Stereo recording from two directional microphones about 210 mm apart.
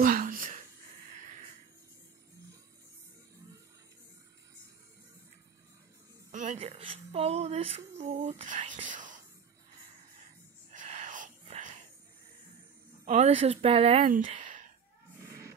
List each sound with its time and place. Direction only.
0.0 s a sound: 40° right (ahead or behind)
6.3 s speech: 35° right (ahead or behind)
10.7 s whispering: 35° right (ahead or behind)
13.0 s speech: 30° right (ahead or behind)
14.0 s speech: 40° right (ahead or behind)
14.3 s a sound: 35° right (ahead or behind)
15.1 s music: 15° right (ahead or behind)